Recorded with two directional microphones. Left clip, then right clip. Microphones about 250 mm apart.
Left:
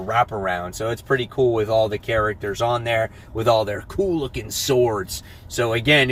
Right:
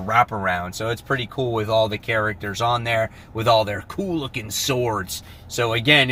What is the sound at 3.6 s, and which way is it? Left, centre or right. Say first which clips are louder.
Speech: left 2 dB; centre.